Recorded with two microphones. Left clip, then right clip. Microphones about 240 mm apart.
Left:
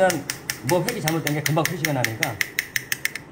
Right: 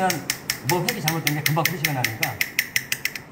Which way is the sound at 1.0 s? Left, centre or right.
Left.